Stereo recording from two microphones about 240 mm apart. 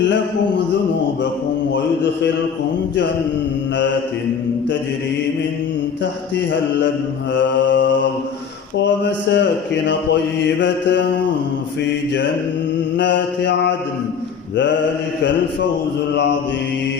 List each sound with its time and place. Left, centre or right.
7.3 s mantra: left
13.0 s mantra: left